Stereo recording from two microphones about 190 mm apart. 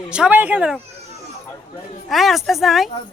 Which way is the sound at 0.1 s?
5° right (ahead or behind).